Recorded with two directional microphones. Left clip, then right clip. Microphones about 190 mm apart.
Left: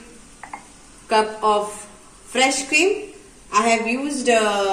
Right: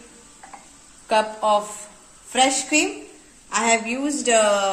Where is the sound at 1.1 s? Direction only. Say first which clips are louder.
Left 1 dB; 60° right (ahead or behind).